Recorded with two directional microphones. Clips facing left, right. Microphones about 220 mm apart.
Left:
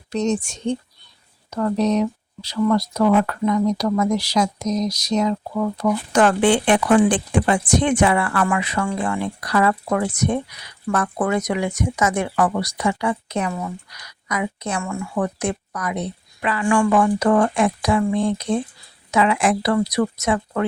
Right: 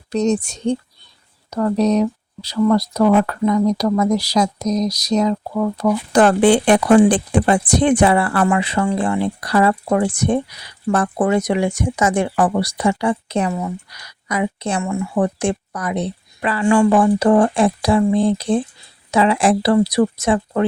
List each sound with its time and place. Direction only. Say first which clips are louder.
0.1 s speech: right 4 dB; 35° right (ahead or behind)
16.6 s speech: right 4 dB; 25° right (ahead or behind)